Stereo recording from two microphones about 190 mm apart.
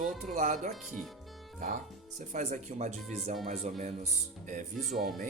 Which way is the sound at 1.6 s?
40° right (ahead or behind).